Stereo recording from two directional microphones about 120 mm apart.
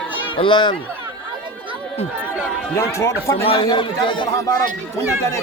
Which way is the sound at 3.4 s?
50° left (ahead or behind).